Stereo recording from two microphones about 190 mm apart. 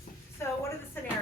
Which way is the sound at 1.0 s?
10° left (ahead or behind).